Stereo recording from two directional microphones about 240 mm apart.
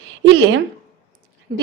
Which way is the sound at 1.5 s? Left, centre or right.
Right.